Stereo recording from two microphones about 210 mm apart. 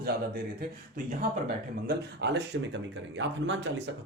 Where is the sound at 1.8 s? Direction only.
55° right (ahead or behind).